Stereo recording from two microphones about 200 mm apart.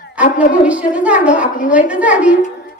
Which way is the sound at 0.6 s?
5° right (ahead or behind).